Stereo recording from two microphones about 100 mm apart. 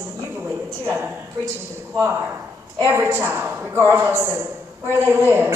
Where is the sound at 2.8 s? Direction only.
20° right (ahead or behind).